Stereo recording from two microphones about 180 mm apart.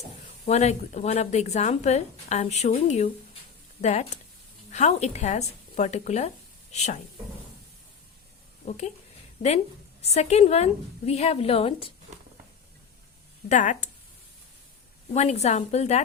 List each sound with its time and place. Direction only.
0.4 s speech: 40° left (ahead or behind)
8.6 s speech: 40° left (ahead or behind)
10.0 s speech: 35° left (ahead or behind)
13.5 s speech: 45° left (ahead or behind)
15.1 s speech: 40° left (ahead or behind)